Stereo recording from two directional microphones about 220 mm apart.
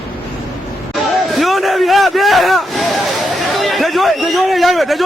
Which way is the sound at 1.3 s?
Centre (ahead or behind).